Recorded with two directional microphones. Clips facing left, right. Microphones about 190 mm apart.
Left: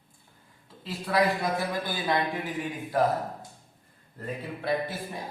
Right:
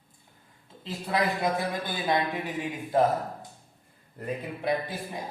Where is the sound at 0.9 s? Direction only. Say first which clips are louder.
Left 2 dB; 20° right (ahead or behind).